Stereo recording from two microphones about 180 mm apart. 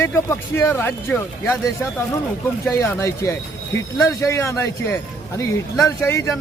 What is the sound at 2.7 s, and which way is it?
Speech, 15° left (ahead or behind).